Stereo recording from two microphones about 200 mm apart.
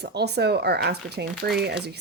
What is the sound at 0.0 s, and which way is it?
Speech, 55° right (ahead or behind).